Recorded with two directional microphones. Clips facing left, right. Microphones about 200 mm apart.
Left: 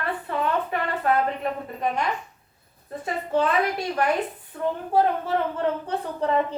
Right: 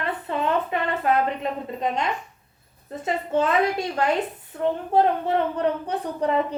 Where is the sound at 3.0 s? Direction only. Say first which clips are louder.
Right 1 dB; 25° right (ahead or behind).